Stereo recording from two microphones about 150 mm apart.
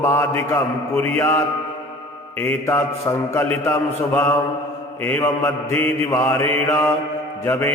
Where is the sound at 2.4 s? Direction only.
15° left (ahead or behind).